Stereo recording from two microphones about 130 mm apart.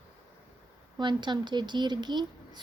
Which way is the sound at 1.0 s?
35° right (ahead or behind).